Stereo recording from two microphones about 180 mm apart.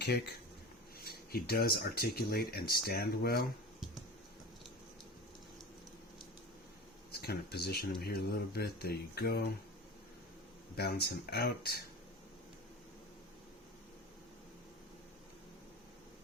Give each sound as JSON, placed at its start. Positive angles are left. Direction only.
{"t": 0.9, "sound": "speech", "side_deg": 60}
{"t": 7.1, "sound": "speech", "side_deg": 60}
{"t": 10.8, "sound": "speech", "side_deg": 60}